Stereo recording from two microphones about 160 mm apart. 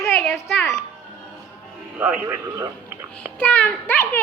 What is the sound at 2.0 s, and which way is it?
Speech, 10° right (ahead or behind).